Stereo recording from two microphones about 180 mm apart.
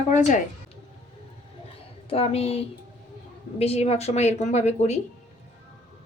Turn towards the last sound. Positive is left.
turn(degrees=40)  # may be behind; listen again after turning